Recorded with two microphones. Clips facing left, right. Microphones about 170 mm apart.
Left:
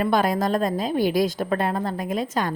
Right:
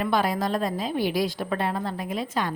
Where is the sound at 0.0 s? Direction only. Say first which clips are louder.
Left 3 dB; 45° left (ahead or behind).